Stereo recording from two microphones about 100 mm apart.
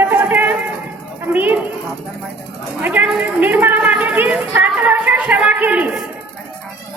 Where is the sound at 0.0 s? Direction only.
20° right (ahead or behind).